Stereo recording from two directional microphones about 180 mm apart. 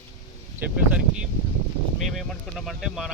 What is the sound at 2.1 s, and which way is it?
Speech, centre (ahead or behind).